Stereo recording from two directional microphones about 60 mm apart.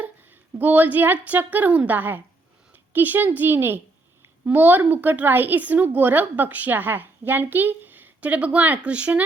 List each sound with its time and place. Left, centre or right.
0.0 s a woman's voice: right
2.7 s a sound: right
3.3 s a child's voice: right